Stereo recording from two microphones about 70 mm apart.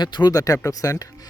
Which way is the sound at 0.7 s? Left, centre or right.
Left.